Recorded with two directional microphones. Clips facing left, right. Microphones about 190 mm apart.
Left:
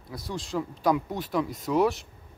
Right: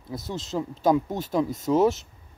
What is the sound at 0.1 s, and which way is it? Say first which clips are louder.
Speech: right 2 dB; 25° right (ahead or behind).